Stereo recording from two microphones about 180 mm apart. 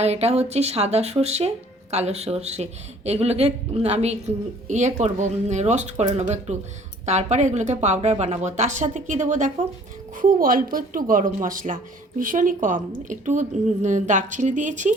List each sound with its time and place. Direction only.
0.0 s speech: 35° right (ahead or behind)